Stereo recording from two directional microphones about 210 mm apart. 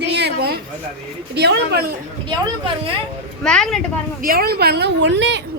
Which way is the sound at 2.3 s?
20° right (ahead or behind).